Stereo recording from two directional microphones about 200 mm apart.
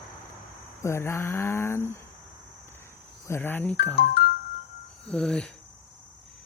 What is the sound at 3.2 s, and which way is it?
Speech, 10° left (ahead or behind).